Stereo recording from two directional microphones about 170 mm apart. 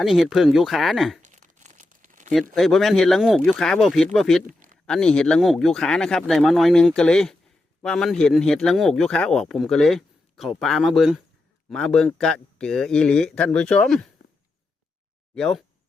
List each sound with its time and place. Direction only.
0.0 s a man's voice: centre (ahead or behind)
1.2 s crumpling: 45° right (ahead or behind)
2.6 s a man's voice: centre (ahead or behind)
4.4 s a sound: 50° right (ahead or behind)
4.9 s a man's voice: 5° left (ahead or behind)
15.4 s a man's voice: 5° left (ahead or behind)